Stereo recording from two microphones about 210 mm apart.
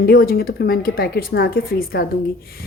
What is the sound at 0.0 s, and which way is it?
A woman's voice, 45° left (ahead or behind).